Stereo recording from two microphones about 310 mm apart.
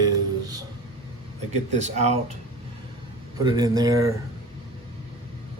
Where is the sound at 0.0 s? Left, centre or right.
Centre.